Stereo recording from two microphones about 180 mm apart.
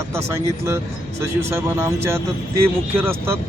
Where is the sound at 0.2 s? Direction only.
15° right (ahead or behind).